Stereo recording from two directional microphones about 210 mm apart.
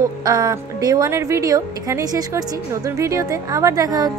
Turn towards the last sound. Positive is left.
turn(degrees=-15)  # may be behind; listen again after turning